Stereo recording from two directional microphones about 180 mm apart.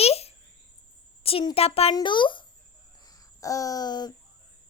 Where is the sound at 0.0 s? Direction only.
35° left (ahead or behind).